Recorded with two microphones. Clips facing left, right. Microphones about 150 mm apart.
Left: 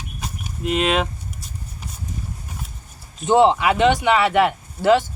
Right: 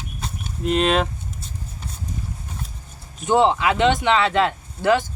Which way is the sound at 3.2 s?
20° left (ahead or behind).